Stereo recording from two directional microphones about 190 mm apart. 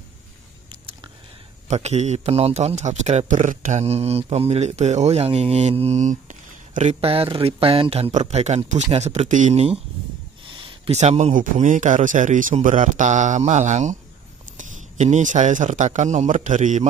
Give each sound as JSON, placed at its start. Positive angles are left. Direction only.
{"t": 1.7, "sound": "a man's voice", "side_deg": -35}